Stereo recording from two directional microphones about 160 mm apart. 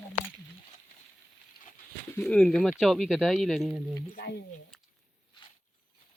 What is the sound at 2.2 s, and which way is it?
Speech, 5° left (ahead or behind).